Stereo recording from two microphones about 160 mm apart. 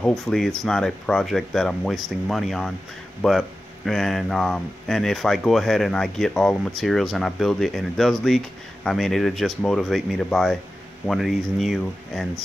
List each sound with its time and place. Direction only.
0.0 s speech: centre (ahead or behind)